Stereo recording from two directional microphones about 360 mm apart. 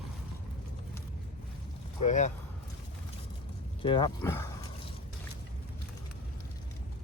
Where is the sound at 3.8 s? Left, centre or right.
Centre.